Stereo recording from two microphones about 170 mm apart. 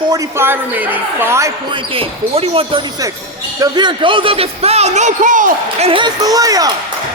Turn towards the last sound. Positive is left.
turn(degrees=-20)  # may be behind; listen again after turning